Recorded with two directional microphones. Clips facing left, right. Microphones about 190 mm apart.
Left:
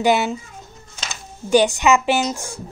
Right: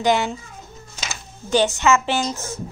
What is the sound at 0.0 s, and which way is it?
Speech, 10° left (ahead or behind).